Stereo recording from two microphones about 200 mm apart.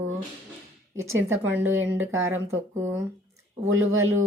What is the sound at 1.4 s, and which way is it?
Speech, 10° right (ahead or behind).